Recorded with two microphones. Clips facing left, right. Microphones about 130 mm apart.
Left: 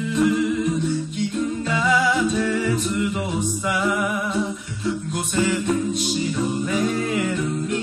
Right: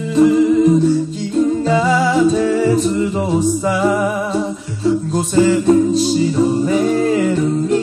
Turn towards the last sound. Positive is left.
turn(degrees=-30)  # may be behind; listen again after turning